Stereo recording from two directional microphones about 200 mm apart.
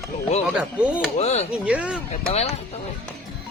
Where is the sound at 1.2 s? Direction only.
35° left (ahead or behind).